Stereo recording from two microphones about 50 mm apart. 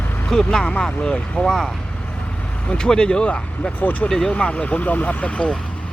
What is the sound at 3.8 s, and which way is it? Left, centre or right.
Speech, left.